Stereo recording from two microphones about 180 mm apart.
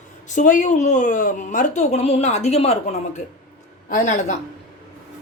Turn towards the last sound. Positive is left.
turn(degrees=45)  # may be behind; listen again after turning